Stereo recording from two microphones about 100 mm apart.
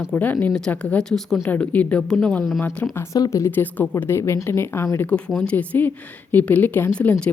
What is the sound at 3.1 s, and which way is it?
A woman's voice, 35° left (ahead or behind).